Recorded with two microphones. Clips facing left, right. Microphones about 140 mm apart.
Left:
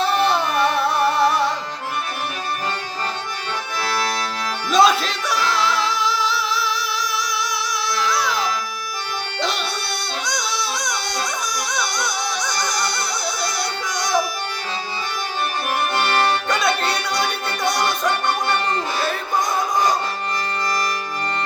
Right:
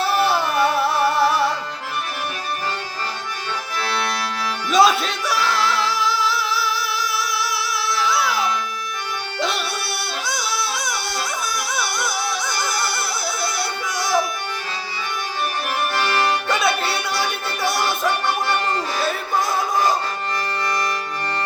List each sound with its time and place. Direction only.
0.0 s music: 5° right (ahead or behind)
4.7 s music: centre (ahead or behind)
7.9 s music: 5° right (ahead or behind)
10.2 s a sound: 5° right (ahead or behind)
11.7 s music: 5° right (ahead or behind)
16.3 s music: 5° right (ahead or behind)